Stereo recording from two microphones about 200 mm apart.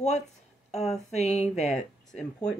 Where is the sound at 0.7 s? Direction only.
35° left (ahead or behind).